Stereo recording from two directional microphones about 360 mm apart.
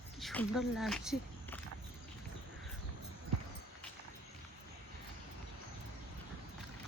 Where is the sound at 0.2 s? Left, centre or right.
Centre.